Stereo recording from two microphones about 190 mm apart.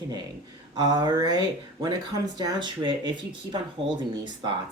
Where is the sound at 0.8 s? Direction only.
20° right (ahead or behind).